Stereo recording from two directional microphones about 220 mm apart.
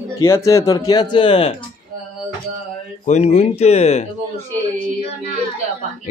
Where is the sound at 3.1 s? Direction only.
30° left (ahead or behind).